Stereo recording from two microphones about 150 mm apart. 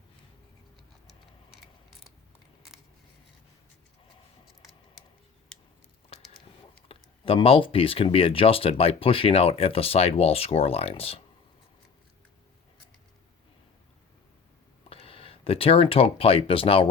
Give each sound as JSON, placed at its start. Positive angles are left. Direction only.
{"t": 6.8, "sound": "speech", "side_deg": 40}
{"t": 14.8, "sound": "speech", "side_deg": 40}